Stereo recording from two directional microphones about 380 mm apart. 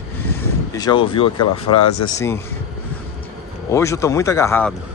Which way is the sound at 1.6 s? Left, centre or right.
Left.